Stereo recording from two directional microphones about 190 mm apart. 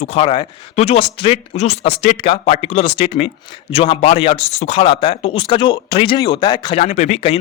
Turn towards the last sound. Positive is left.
turn(degrees=35)  # may be behind; listen again after turning